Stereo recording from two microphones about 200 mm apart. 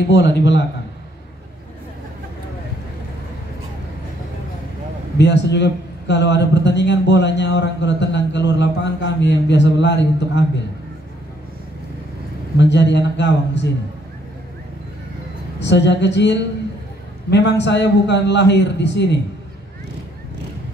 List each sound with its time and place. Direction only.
0.1 s a man's voice: 60° left (ahead or behind)
5.1 s a man's voice: 60° left (ahead or behind)
12.5 s a man's voice: 60° left (ahead or behind)
15.6 s a man's voice: 60° left (ahead or behind)